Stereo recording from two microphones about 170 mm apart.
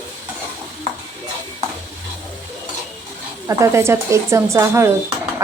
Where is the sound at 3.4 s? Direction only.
15° right (ahead or behind).